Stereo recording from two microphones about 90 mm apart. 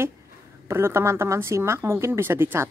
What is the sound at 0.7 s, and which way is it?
A woman's voice, 30° right (ahead or behind).